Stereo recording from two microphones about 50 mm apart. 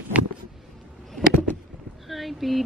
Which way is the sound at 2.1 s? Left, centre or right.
Centre.